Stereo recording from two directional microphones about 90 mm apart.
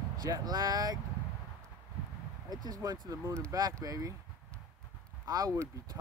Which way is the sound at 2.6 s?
45° right (ahead or behind).